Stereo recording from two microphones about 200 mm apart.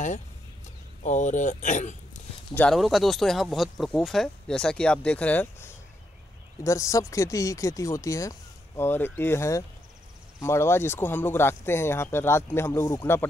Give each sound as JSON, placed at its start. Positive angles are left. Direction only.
{"t": 1.0, "sound": "speech", "side_deg": 40}
{"t": 2.5, "sound": "speech", "side_deg": 5}